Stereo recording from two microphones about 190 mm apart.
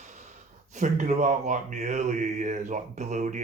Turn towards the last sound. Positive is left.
turn(degrees=-40)  # may be behind; listen again after turning